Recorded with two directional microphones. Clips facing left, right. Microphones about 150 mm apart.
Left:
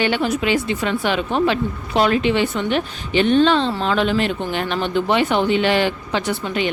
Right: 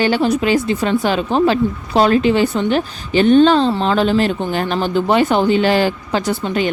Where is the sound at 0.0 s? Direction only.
35° right (ahead or behind).